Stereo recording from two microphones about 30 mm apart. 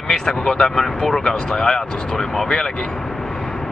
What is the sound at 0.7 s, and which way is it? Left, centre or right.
Speech, centre.